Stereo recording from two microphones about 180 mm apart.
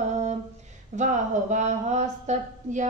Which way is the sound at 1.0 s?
45° right (ahead or behind).